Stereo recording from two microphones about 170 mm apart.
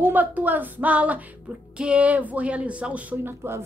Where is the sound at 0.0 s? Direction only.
10° right (ahead or behind).